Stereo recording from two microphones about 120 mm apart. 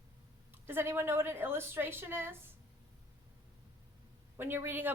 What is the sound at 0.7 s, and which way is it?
A woman's voice, 20° right (ahead or behind).